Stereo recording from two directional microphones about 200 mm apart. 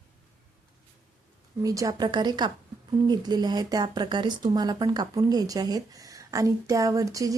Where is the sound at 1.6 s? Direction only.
15° right (ahead or behind).